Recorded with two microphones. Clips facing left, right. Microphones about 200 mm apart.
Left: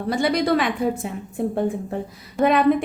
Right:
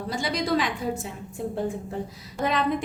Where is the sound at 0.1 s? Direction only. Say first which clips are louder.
Left 6 dB; 60° left (ahead or behind).